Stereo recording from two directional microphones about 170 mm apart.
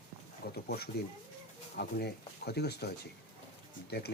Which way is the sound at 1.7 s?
70° left (ahead or behind).